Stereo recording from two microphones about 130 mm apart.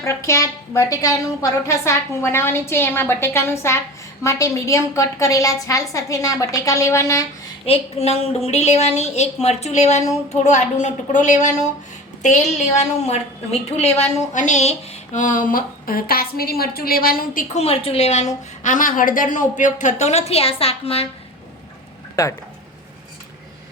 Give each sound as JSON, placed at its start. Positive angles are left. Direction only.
{"t": 0.0, "sound": "a woman's voice", "side_deg": 20}
{"t": 7.6, "sound": "a woman's voice", "side_deg": 50}
{"t": 17.2, "sound": "a woman's voice", "side_deg": 90}
{"t": 17.6, "sound": "a woman's voice", "side_deg": 50}
{"t": 22.1, "sound": "speech", "side_deg": 25}